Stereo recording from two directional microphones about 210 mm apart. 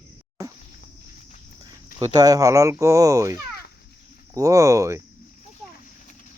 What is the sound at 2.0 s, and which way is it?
Speech, 20° right (ahead or behind).